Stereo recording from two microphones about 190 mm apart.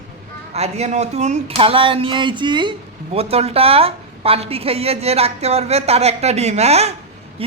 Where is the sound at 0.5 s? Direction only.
35° right (ahead or behind).